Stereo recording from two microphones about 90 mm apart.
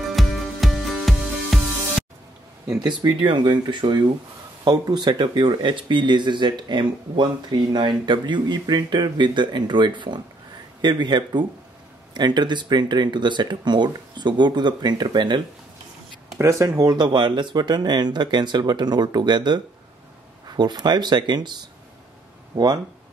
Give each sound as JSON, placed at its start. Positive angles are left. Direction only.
{"t": 0.1, "sound": "music", "side_deg": 0}
{"t": 2.8, "sound": "speech", "side_deg": -55}
{"t": 16.3, "sound": "speech", "side_deg": -35}
{"t": 16.9, "sound": "speech", "side_deg": -55}
{"t": 22.5, "sound": "speech", "side_deg": -25}